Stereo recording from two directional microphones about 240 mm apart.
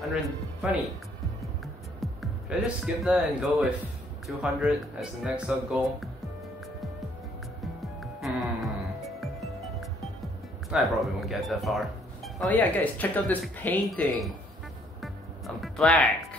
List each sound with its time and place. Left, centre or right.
0.0 s speech: centre
2.0 s music: centre
2.6 s speech: centre
7.8 s music: centre
12.4 s speech: centre
15.0 s music: centre